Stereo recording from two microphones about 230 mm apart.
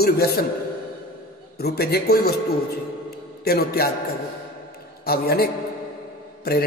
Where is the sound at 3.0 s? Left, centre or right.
Left.